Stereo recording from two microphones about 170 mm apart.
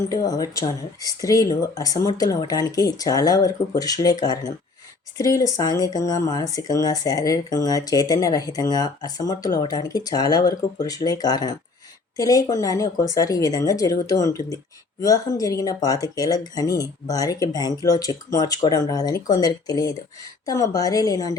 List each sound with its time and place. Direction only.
0.1 s speech: 20° left (ahead or behind)